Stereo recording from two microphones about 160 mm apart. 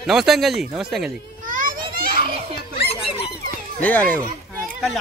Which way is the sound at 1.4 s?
55° right (ahead or behind).